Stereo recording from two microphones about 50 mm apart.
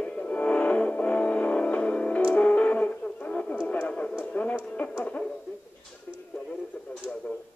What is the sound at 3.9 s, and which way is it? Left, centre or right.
Radio, centre.